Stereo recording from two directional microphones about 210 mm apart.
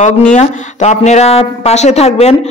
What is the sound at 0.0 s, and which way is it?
Speech, 35° left (ahead or behind).